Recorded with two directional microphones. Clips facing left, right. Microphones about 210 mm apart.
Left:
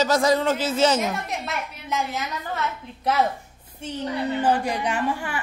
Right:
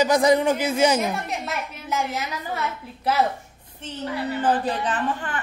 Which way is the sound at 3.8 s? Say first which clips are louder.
Left 2 dB; 15° left (ahead or behind).